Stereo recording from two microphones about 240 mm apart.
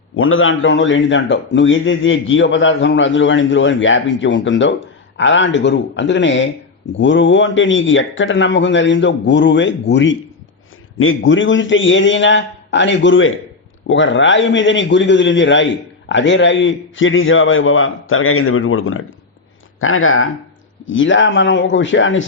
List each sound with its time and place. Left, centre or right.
0.2 s a man's voice: left